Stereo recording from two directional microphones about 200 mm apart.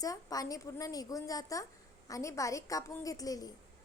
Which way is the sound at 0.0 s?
20° left (ahead or behind).